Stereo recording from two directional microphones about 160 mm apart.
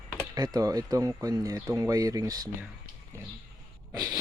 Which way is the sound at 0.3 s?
25° right (ahead or behind).